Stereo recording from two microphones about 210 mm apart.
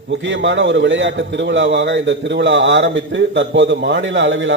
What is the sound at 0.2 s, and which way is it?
A man's voice, 60° right (ahead or behind).